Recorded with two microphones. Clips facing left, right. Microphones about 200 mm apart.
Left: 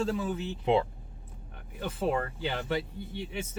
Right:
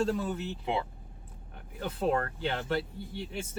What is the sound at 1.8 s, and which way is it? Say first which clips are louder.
Speech: even; centre (ahead or behind).